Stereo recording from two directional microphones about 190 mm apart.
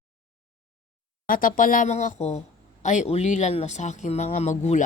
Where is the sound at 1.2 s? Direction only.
45° left (ahead or behind).